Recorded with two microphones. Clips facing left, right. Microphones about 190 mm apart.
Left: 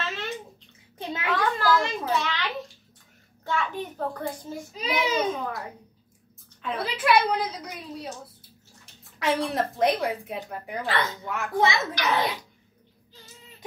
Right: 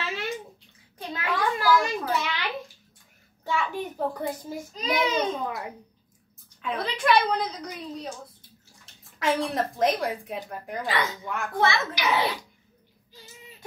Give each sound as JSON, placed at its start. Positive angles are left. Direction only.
{"t": 0.0, "sound": "bathtub", "side_deg": -10}
{"t": 1.3, "sound": "a sound", "side_deg": -10}
{"t": 3.4, "sound": "a child's voice", "side_deg": -10}
{"t": 4.7, "sound": "a child's voice", "side_deg": 5}
{"t": 6.6, "sound": "a woman's voice", "side_deg": 5}
{"t": 10.8, "sound": "a child's voice", "side_deg": -15}
{"t": 11.2, "sound": "a woman's voice", "side_deg": 0}
{"t": 11.6, "sound": "a child's voice", "side_deg": 15}
{"t": 11.9, "sound": "a child's voice", "side_deg": -10}